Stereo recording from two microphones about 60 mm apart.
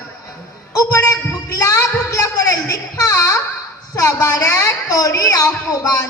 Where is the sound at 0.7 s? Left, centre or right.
Left.